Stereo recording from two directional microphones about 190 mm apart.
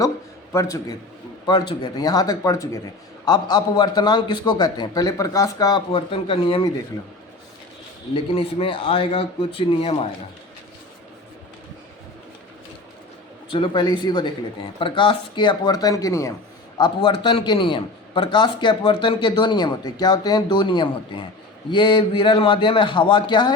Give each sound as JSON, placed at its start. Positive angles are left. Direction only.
{"t": 0.5, "sound": "a man's voice", "side_deg": 15}
{"t": 8.1, "sound": "a man's voice", "side_deg": 30}
{"t": 13.5, "sound": "a man's voice", "side_deg": 25}